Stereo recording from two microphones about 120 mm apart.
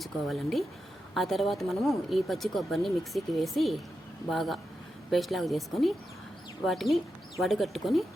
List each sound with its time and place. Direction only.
0.0 s speech: centre (ahead or behind)